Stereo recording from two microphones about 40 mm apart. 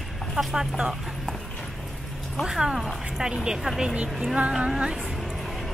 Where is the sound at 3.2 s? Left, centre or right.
Right.